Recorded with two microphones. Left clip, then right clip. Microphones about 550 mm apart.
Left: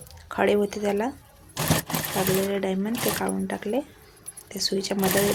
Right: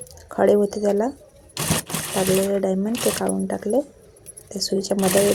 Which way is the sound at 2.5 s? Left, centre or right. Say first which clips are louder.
Right 5 dB; left.